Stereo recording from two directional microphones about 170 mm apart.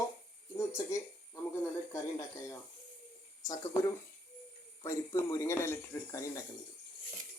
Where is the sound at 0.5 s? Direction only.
15° left (ahead or behind).